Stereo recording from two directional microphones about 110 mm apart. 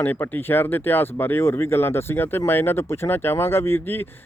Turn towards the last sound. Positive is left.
turn(degrees=20)  # may be behind; listen again after turning